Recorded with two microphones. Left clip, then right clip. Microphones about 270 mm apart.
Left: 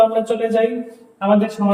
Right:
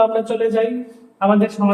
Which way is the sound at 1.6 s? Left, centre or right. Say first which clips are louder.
Right 1 dB; centre.